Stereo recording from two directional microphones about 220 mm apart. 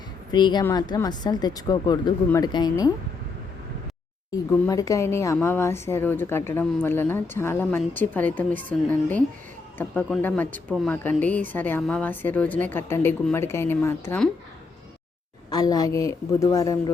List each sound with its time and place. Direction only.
0.3 s a woman's voice: 20° left (ahead or behind)
4.6 s a woman's voice: 15° left (ahead or behind)
15.4 s a woman's voice: 15° left (ahead or behind)